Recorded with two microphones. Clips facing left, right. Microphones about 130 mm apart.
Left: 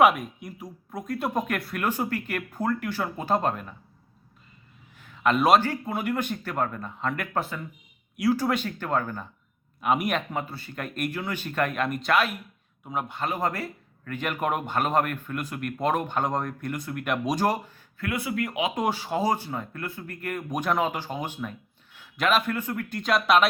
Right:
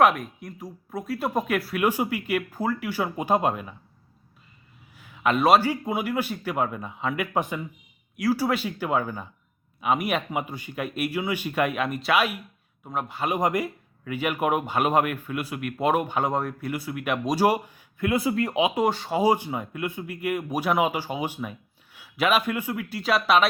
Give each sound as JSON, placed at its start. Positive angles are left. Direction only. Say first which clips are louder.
{"t": 0.0, "sound": "speech", "louder": "even", "side_deg": 0}
{"t": 4.9, "sound": "speech", "louder": "even", "side_deg": -5}
{"t": 8.1, "sound": "speech", "louder": "even", "side_deg": 0}
{"t": 13.2, "sound": "speech", "louder": "right 5 dB", "side_deg": -15}
{"t": 18.2, "sound": "speech", "louder": "right 3 dB", "side_deg": -30}
{"t": 18.7, "sound": "speech", "louder": "right 3 dB", "side_deg": 0}
{"t": 19.2, "sound": "speech", "louder": "right 6 dB", "side_deg": -10}